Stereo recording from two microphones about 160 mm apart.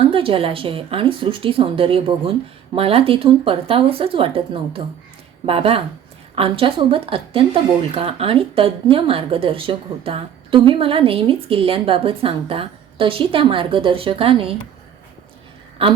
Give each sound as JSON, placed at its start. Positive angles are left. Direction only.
{"t": 0.1, "sound": "a woman's voice", "side_deg": -35}
{"t": 15.8, "sound": "a woman's voice", "side_deg": -35}